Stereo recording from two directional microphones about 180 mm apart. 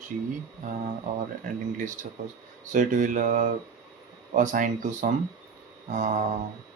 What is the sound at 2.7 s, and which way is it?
Speech, 45° right (ahead or behind).